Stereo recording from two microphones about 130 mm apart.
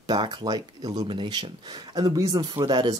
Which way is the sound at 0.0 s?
35° right (ahead or behind).